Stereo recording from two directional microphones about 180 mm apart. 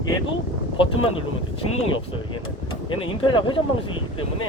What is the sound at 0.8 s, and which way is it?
Speech, 30° left (ahead or behind).